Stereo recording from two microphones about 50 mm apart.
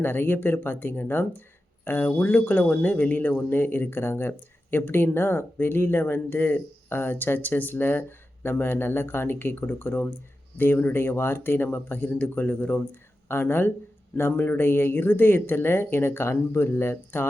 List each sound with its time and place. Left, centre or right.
0.0 s speech: left
1.8 s speech: left
12.2 s speech: left